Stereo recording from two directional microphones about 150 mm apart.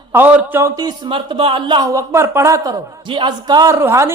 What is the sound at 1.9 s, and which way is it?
Speech, 20° right (ahead or behind).